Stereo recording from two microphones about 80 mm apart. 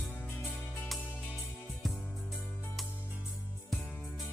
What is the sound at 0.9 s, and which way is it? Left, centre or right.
Music, centre.